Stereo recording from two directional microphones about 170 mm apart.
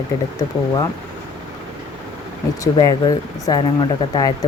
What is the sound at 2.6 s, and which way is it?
Speech, 20° left (ahead or behind).